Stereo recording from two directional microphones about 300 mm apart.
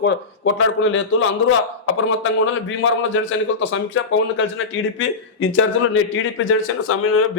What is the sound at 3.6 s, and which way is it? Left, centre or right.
A man's voice, left.